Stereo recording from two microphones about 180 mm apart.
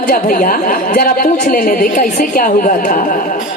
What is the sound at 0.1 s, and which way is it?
A woman's voice, 50° left (ahead or behind).